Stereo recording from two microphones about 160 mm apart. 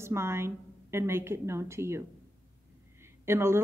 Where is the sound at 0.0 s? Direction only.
15° right (ahead or behind).